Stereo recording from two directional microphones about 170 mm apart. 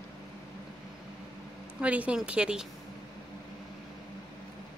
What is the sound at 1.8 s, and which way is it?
Speech, 10° right (ahead or behind).